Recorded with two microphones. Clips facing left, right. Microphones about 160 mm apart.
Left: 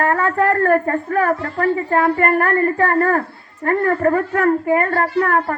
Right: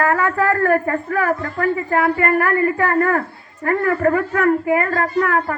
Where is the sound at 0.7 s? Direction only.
40° left (ahead or behind).